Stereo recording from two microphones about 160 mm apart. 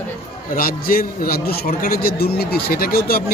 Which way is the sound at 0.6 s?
65° left (ahead or behind).